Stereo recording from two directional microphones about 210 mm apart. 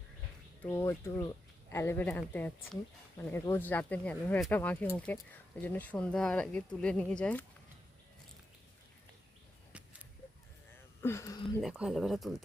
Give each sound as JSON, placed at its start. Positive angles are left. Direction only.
{"t": 0.6, "sound": "speech", "side_deg": 15}
{"t": 11.0, "sound": "a sound", "side_deg": 15}
{"t": 11.6, "sound": "speech", "side_deg": -5}